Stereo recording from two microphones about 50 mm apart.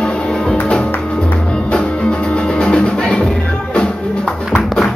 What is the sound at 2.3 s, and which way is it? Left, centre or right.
Music, centre.